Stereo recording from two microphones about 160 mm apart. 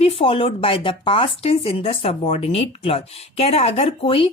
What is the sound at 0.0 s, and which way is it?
Speech, 35° left (ahead or behind).